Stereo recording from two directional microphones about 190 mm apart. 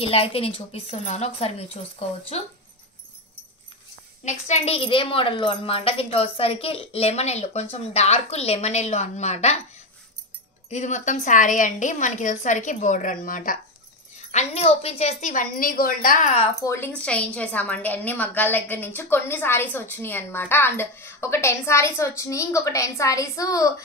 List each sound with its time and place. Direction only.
0.0 s a woman's voice: 30° left (ahead or behind)
4.2 s a woman's voice: 35° left (ahead or behind)
10.7 s a woman's voice: 40° left (ahead or behind)
14.3 s a woman's voice: 35° left (ahead or behind)
16.6 s a woman's voice: 15° left (ahead or behind)